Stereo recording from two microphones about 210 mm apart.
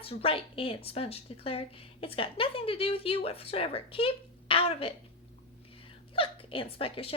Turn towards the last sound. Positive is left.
turn(degrees=25)  # may be behind; listen again after turning